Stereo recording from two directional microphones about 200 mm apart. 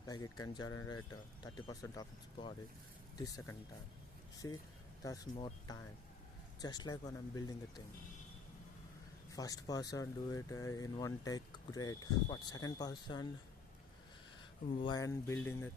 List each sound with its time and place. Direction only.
0.1 s speech: 20° left (ahead or behind)
9.3 s speech: 15° left (ahead or behind)
14.8 s speech: 20° left (ahead or behind)